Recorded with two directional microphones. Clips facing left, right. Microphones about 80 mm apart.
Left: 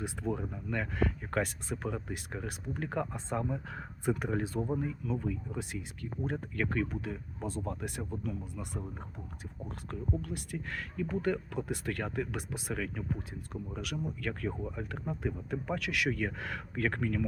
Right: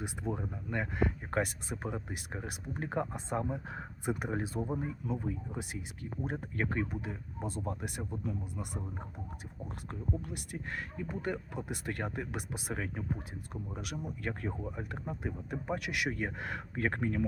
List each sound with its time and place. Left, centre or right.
0.0 s speech: centre